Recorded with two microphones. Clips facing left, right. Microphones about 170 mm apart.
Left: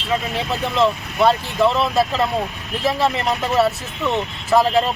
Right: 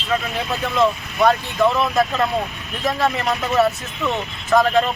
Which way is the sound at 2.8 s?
25° left (ahead or behind).